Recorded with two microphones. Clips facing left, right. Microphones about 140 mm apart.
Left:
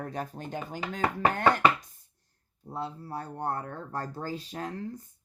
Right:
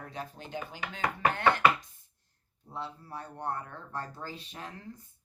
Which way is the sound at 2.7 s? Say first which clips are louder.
Left 5 dB; 40° left (ahead or behind).